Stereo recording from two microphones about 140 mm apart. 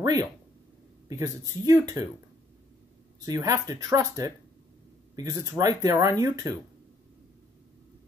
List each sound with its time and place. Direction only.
0.0 s speech: 25° right (ahead or behind)
3.3 s speech: 20° right (ahead or behind)